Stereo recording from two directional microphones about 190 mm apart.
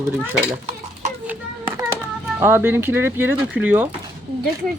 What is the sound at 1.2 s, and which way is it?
Children playing, 15° right (ahead or behind).